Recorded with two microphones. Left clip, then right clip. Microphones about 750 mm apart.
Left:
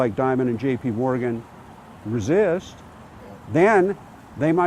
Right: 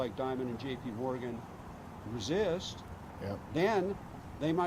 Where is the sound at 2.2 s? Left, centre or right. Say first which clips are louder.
Left 13 dB; left.